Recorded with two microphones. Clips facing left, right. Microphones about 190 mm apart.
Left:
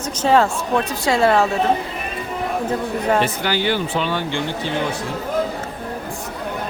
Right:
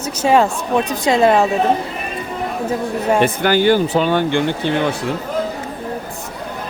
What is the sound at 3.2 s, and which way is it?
Speech, 50° right (ahead or behind).